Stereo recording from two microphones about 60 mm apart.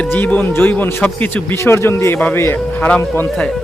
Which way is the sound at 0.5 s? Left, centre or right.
Left.